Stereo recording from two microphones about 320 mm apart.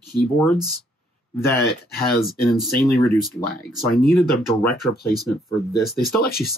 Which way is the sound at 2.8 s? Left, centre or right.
Left.